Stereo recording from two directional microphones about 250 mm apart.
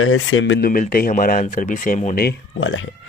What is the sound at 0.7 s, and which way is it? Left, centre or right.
A man's voice, left.